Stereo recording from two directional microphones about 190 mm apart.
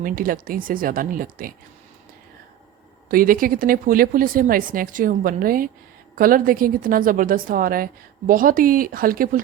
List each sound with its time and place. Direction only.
0.0 s speech: 50° right (ahead or behind)
3.1 s speech: 50° right (ahead or behind)